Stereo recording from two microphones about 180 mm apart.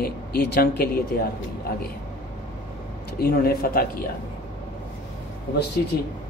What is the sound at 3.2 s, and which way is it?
Speech, 60° left (ahead or behind).